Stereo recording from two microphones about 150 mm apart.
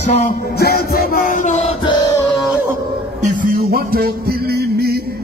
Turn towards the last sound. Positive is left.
turn(degrees=-85)